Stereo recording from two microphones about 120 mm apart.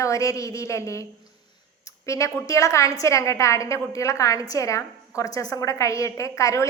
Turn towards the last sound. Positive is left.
turn(degrees=25)  # may be behind; listen again after turning